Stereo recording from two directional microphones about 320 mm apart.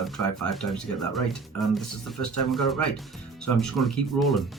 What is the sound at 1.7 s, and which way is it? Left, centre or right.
Speech, centre.